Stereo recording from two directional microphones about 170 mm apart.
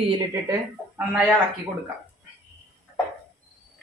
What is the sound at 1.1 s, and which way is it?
Speech, 5° right (ahead or behind).